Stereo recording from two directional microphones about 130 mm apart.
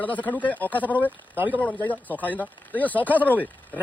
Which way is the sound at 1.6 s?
10° left (ahead or behind).